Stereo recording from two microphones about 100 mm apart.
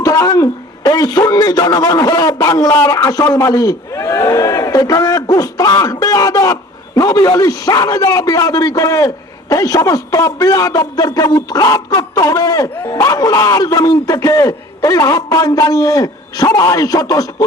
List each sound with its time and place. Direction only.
0.0 s a man's voice: 35° left (ahead or behind)